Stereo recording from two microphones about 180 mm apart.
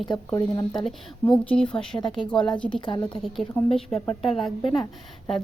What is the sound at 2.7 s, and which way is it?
Speech, 30° left (ahead or behind).